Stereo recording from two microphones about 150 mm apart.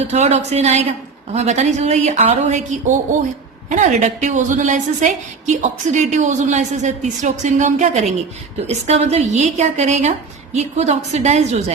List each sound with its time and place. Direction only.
0.0 s a woman's voice: 45° right (ahead or behind)